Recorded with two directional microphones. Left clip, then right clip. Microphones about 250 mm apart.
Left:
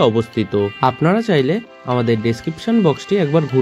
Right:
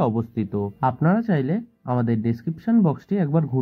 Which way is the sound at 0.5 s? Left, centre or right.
Left.